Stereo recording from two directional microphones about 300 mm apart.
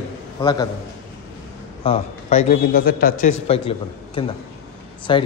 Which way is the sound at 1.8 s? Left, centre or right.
Left.